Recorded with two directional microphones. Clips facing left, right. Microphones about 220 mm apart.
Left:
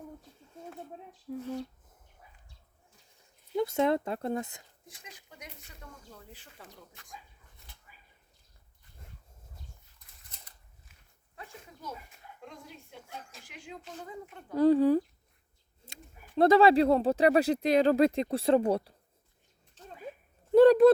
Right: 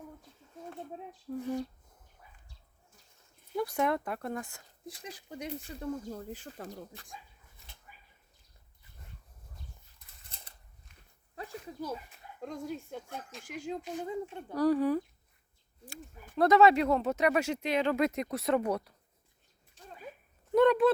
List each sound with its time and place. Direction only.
1.3 s speech: 5° left (ahead or behind)
3.5 s speech: 25° left (ahead or behind)
4.9 s speech: 35° right (ahead or behind)
10.3 s a sound: 30° right (ahead or behind)
11.3 s speech: 35° right (ahead or behind)
13.8 s speech: 20° right (ahead or behind)
14.5 s speech: 25° left (ahead or behind)
16.3 s speech: 30° left (ahead or behind)
19.8 s a sound: 10° right (ahead or behind)
20.5 s speech: 35° left (ahead or behind)